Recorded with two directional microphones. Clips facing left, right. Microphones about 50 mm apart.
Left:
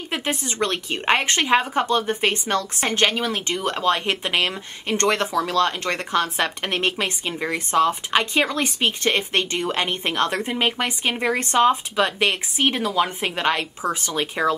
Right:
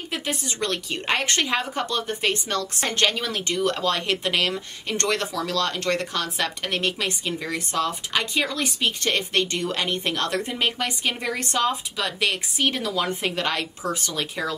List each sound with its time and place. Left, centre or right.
0.1 s speech: left